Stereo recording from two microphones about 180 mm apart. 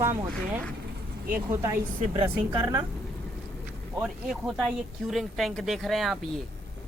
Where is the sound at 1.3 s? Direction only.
15° right (ahead or behind).